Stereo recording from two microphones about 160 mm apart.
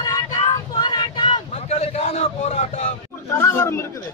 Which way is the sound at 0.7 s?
25° left (ahead or behind).